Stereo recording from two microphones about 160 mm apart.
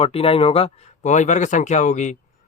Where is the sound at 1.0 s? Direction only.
50° left (ahead or behind).